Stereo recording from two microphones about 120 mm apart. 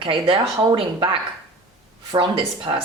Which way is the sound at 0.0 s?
50° right (ahead or behind).